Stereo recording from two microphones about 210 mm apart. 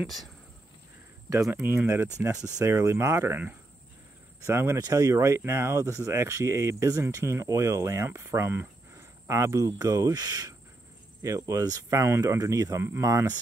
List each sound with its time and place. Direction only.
1.4 s speech: 10° right (ahead or behind)